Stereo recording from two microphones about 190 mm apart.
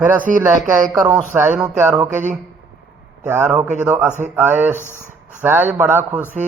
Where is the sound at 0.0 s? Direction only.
10° right (ahead or behind).